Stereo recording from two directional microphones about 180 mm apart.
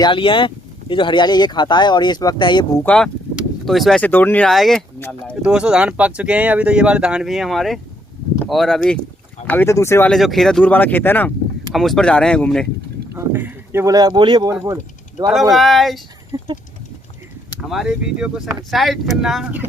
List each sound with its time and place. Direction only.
0.0 s speech: 30° left (ahead or behind)
2.8 s speech: 5° left (ahead or behind)
9.5 s speech: 15° left (ahead or behind)
10.1 s speech: centre (ahead or behind)
13.1 s speech: 10° right (ahead or behind)
15.5 s speech: centre (ahead or behind)
16.3 s a sound: 20° right (ahead or behind)
17.6 s speech: centre (ahead or behind)